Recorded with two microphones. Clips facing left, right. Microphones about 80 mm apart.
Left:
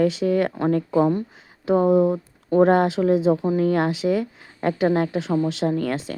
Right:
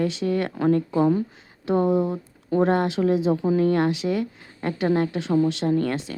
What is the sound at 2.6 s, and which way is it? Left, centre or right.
Speech, left.